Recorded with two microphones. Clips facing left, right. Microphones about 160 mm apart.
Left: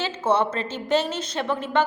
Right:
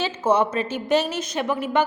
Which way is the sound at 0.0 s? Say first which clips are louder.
Right 2 dB; 10° right (ahead or behind).